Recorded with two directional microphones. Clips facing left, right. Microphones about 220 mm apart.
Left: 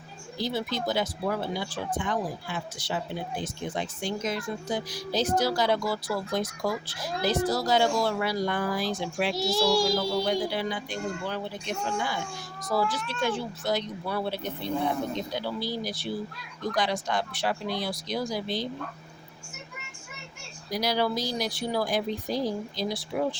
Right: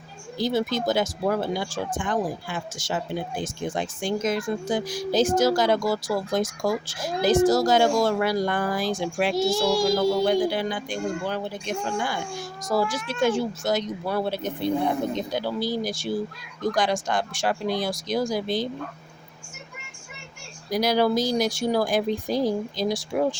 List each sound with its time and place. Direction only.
0.3 s speech: 45° right (ahead or behind)
20.7 s speech: 50° right (ahead or behind)